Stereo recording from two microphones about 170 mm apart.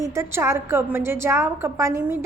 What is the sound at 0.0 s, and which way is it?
A woman's voice, 15° right (ahead or behind).